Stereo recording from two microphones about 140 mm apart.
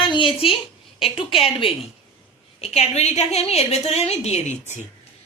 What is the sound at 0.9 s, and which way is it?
Speech, 40° left (ahead or behind).